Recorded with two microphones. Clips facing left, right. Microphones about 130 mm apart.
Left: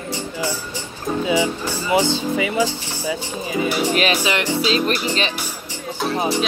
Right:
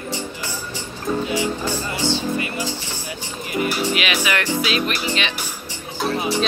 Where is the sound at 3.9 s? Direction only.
35° left (ahead or behind).